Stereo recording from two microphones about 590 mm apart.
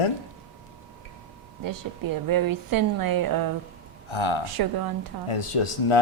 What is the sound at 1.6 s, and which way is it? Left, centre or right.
A woman's voice, right.